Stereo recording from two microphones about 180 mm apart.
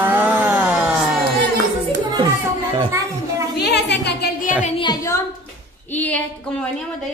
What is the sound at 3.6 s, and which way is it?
Speech, 65° left (ahead or behind).